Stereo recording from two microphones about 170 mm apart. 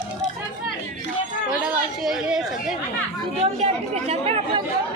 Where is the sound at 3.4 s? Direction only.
35° right (ahead or behind).